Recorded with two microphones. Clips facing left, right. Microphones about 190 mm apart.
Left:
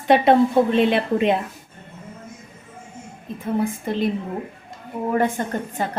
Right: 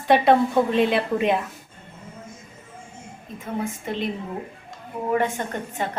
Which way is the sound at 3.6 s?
40° left (ahead or behind).